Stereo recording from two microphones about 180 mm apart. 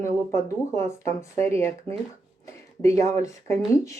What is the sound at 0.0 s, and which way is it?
Speech, 15° left (ahead or behind).